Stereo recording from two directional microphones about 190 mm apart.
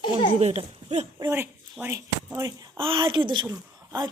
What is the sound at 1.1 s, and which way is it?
Speech, 15° right (ahead or behind).